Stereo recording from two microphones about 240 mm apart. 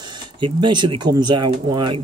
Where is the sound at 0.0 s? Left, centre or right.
Centre.